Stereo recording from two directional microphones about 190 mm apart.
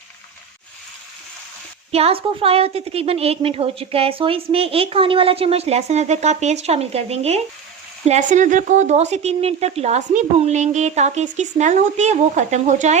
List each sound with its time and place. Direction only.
1.9 s a woman's voice: 30° right (ahead or behind)